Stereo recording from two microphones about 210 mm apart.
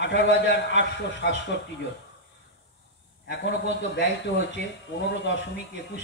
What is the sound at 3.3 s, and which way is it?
A man's voice, 60° left (ahead or behind).